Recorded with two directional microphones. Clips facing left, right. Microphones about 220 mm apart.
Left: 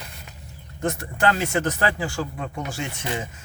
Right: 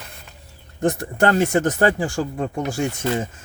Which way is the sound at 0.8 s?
50° right (ahead or behind).